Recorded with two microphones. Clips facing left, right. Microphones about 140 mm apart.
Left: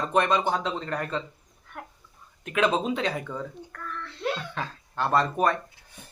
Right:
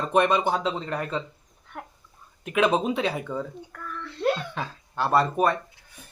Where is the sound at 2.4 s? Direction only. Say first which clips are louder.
Right 2 dB; 15° right (ahead or behind).